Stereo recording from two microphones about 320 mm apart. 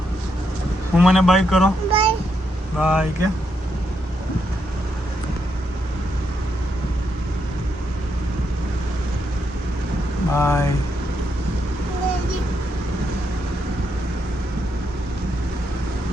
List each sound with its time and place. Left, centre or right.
0.9 s speech: centre
1.9 s a sound: centre
2.7 s speech: centre
10.3 s speech: centre